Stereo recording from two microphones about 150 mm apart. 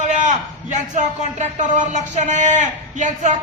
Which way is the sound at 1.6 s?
55° right (ahead or behind).